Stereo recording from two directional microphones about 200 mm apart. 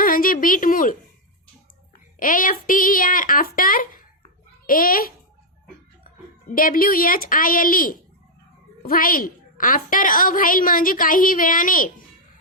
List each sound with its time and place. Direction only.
0.0 s a sound: 45° left (ahead or behind)
2.1 s a woman's voice: 40° left (ahead or behind)
6.5 s a woman's voice: 45° left (ahead or behind)